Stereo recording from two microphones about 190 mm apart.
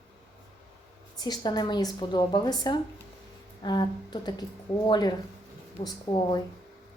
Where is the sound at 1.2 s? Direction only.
20° left (ahead or behind).